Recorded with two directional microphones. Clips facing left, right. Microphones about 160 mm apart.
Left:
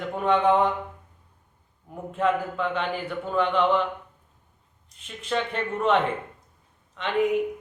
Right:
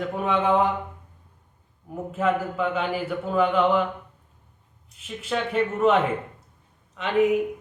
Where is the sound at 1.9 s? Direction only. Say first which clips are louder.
Right 1 dB; 5° right (ahead or behind).